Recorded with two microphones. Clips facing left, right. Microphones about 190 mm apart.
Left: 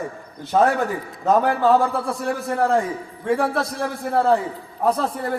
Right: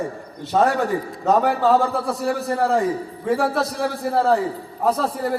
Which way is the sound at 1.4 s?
Centre (ahead or behind).